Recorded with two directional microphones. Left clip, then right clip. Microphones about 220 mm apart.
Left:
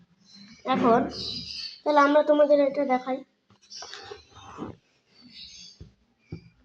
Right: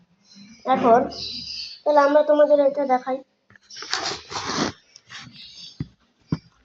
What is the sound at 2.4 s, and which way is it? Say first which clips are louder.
Speech: right 4 dB; 35° left (ahead or behind).